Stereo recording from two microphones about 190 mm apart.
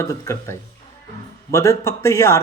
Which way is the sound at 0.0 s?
15° left (ahead or behind).